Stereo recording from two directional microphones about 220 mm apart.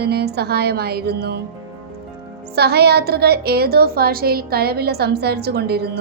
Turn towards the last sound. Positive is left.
turn(degrees=-45)  # may be behind; listen again after turning